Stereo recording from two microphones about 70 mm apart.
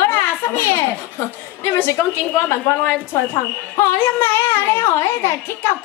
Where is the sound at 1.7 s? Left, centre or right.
Left.